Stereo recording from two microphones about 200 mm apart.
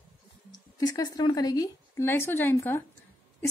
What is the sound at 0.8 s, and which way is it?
A woman's voice, 15° left (ahead or behind).